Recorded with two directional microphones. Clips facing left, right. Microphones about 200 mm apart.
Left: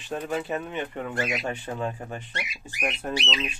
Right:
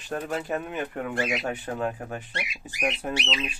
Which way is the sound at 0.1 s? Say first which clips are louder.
Even; centre (ahead or behind).